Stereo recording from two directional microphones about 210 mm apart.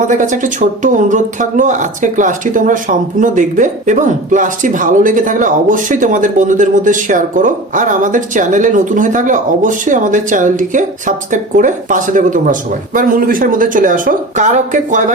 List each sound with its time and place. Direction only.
0.1 s speech: 35° right (ahead or behind)